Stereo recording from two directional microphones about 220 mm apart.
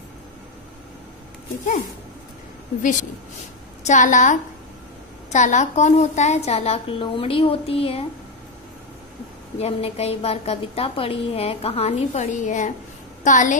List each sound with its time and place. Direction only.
2.8 s a woman's voice: 35° left (ahead or behind)
9.6 s a woman's voice: 25° left (ahead or behind)